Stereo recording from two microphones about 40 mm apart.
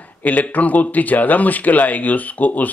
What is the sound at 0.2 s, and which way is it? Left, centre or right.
Speech, left.